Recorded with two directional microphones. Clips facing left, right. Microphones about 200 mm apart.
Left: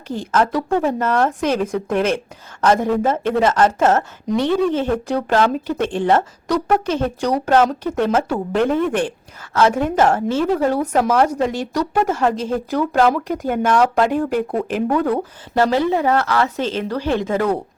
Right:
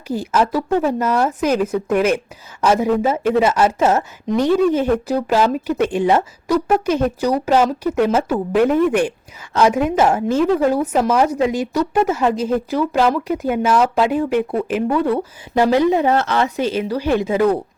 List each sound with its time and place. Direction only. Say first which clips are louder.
0.1 s a woman's voice: right 1 dB; 10° right (ahead or behind)
15.5 s speech: right 2 dB; 15° right (ahead or behind)
16.6 s a woman's voice: right 2 dB; 10° right (ahead or behind)